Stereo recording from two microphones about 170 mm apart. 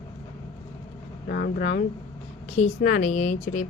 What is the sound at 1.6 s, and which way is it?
A woman's voice, 45° left (ahead or behind).